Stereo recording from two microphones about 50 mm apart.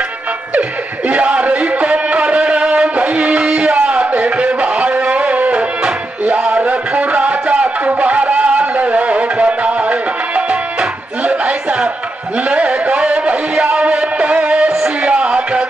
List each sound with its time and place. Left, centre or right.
0.6 s music: right